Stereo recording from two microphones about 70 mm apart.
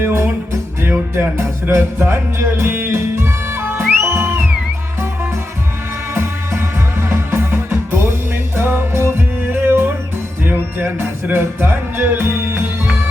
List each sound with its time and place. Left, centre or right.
0.0 s music: right
6.1 s music: right